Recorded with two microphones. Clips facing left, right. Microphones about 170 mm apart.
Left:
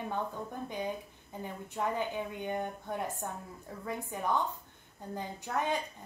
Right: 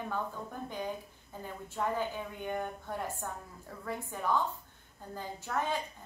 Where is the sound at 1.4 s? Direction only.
15° left (ahead or behind).